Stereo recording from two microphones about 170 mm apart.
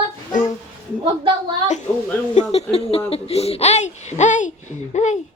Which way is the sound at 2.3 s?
40° left (ahead or behind).